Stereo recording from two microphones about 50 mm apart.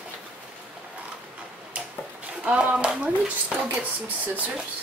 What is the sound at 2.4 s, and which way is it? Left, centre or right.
A woman's voice, right.